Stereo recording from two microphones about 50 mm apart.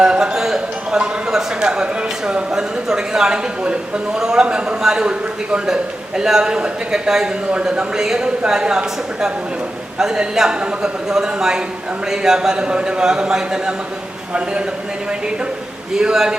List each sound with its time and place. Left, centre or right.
0.0 s a man's voice: centre
15.9 s a man's voice: centre